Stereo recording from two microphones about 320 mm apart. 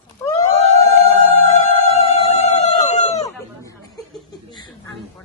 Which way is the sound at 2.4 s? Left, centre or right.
Left.